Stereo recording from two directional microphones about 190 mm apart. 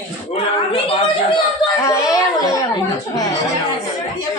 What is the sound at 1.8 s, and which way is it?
Speech, 15° left (ahead or behind).